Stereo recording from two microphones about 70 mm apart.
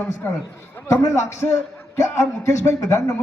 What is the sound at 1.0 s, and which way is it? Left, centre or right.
Speech, left.